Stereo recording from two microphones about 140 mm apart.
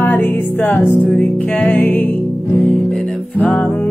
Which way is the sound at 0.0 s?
15° left (ahead or behind).